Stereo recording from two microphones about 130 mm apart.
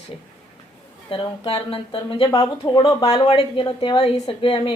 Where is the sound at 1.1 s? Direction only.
40° left (ahead or behind).